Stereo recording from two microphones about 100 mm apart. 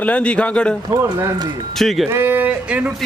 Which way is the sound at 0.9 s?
30° right (ahead or behind).